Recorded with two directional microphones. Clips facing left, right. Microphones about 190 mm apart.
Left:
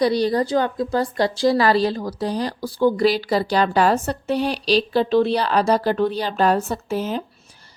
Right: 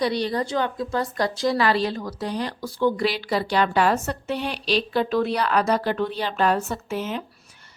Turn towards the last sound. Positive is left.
turn(degrees=35)  # may be behind; listen again after turning